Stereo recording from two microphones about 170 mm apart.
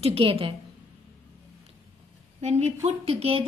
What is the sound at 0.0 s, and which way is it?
Speech, 35° right (ahead or behind).